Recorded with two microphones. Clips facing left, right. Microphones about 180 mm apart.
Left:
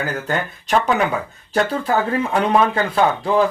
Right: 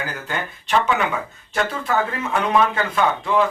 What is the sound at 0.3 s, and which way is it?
Speech, 40° left (ahead or behind).